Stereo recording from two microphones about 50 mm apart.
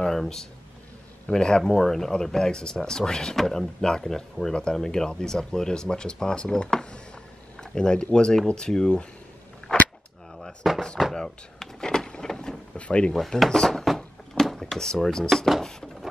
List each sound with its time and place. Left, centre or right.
0.0 s a sound: centre
1.2 s speech: centre
9.6 s cap gun: left
10.4 s a sound: centre
11.1 s drawer open or close: centre
12.7 s speech: left
13.1 s drawer open or close: centre